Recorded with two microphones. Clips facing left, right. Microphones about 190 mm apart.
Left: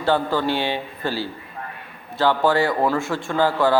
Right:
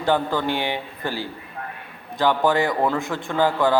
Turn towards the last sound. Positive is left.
turn(degrees=-15)  # may be behind; listen again after turning